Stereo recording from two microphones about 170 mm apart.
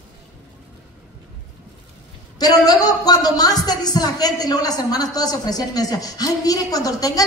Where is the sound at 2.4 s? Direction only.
20° left (ahead or behind).